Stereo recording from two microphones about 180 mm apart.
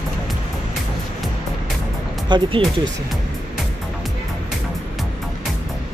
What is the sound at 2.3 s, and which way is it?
Speech, 25° right (ahead or behind).